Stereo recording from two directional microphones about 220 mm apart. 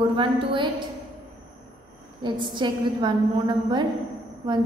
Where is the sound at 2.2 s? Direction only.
20° right (ahead or behind).